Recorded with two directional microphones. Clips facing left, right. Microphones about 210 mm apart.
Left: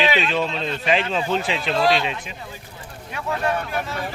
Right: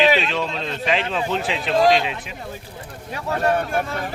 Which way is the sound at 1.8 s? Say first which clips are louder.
Right 3 dB; 45° right (ahead or behind).